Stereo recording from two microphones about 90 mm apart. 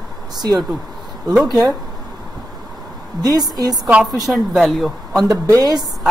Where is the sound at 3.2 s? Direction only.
45° right (ahead or behind).